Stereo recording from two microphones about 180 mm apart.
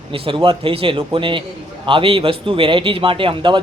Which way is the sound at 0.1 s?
30° right (ahead or behind).